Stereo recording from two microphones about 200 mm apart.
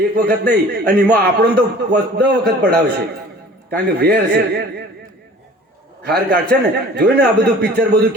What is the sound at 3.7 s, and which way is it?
A man's voice, 55° right (ahead or behind).